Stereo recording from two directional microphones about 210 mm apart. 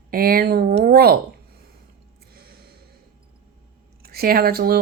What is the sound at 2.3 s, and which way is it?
Gasp, 45° right (ahead or behind).